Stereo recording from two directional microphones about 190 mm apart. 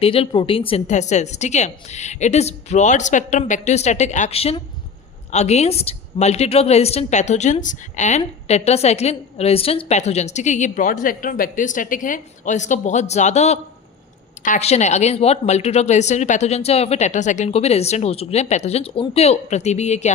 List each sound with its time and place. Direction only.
0.0 s a woman's voice: 30° left (ahead or behind)